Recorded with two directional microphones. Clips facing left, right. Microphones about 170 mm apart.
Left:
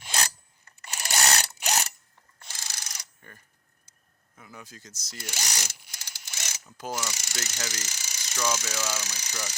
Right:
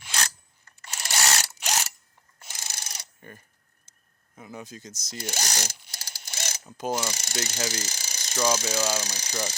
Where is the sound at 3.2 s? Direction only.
20° right (ahead or behind).